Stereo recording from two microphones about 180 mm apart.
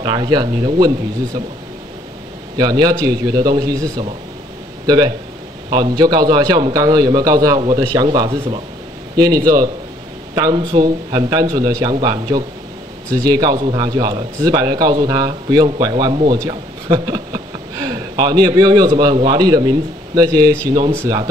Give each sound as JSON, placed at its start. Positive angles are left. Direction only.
{"t": 0.0, "sound": "a man's voice", "side_deg": -25}
{"t": 2.5, "sound": "a man's voice", "side_deg": -20}